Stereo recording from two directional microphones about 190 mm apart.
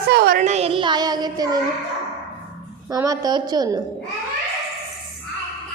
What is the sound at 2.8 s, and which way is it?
Speech, 20° right (ahead or behind).